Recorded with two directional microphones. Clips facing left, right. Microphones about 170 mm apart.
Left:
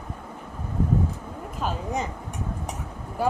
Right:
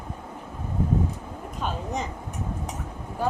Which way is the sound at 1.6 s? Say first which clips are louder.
Left 2 dB; 10° left (ahead or behind).